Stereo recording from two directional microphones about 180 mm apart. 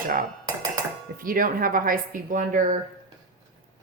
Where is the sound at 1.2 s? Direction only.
50° right (ahead or behind).